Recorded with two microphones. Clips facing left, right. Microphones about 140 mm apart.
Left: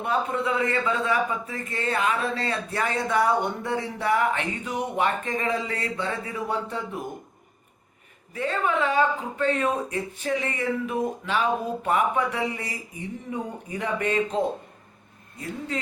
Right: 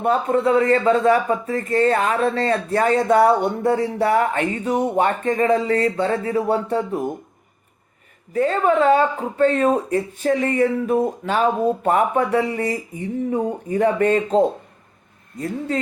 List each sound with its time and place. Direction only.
0.0 s speech: 45° right (ahead or behind)
8.3 s speech: 40° right (ahead or behind)
9.0 s speech: 35° right (ahead or behind)